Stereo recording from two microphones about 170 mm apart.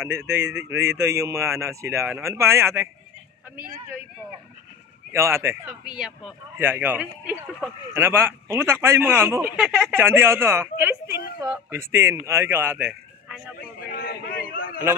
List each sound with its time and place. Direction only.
0.1 s speech: 20° right (ahead or behind)
5.1 s a man's voice: 15° right (ahead or behind)
13.6 s a man's voice: 60° left (ahead or behind)